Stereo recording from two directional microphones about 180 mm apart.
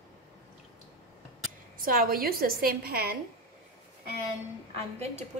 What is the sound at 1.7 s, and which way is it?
A woman's voice, 50° right (ahead or behind).